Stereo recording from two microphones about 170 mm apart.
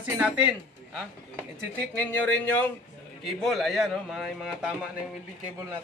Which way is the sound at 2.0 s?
10° left (ahead or behind).